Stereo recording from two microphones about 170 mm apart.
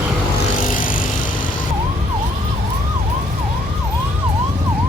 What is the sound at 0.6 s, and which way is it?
Music, 55° left (ahead or behind).